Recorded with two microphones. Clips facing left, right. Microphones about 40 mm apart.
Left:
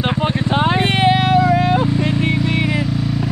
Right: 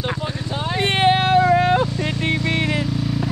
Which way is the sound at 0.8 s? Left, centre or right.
Left.